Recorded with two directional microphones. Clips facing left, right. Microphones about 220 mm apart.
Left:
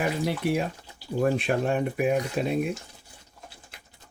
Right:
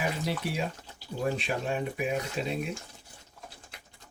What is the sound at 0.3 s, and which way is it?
Speech, 55° left (ahead or behind).